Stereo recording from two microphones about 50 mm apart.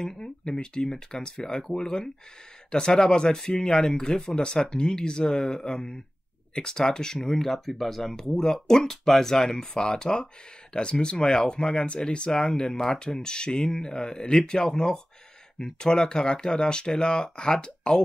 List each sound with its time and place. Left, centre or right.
0.0 s speech: centre